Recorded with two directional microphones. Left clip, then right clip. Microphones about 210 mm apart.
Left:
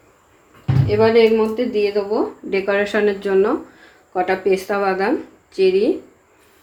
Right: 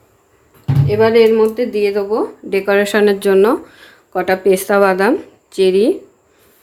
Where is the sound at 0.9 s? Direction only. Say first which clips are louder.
Right 3 dB; 35° right (ahead or behind).